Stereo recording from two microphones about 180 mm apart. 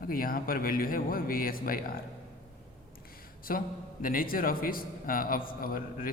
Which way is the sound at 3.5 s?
50° left (ahead or behind).